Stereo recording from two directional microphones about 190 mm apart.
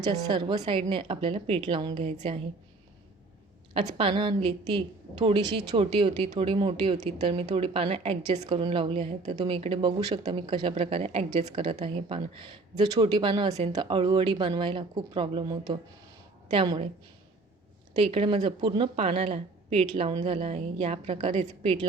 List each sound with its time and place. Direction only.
0.3 s a woman's voice: 25° right (ahead or behind)
3.8 s a woman's voice: 30° right (ahead or behind)
17.9 s a woman's voice: 30° right (ahead or behind)